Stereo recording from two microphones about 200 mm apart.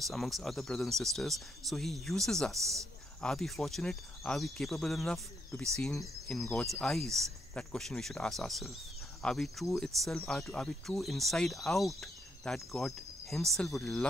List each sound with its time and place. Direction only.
0.1 s speech: centre (ahead or behind)
2.5 s speech: 15° right (ahead or behind)
3.2 s speech: 5° left (ahead or behind)